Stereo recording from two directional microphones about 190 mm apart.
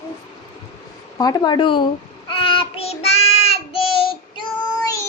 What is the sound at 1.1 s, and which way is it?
Child singing, 20° left (ahead or behind).